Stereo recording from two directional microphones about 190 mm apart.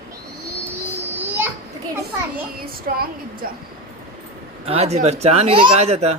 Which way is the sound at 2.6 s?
55° right (ahead or behind).